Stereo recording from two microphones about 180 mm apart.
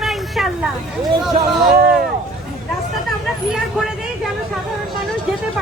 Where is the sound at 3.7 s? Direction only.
5° right (ahead or behind).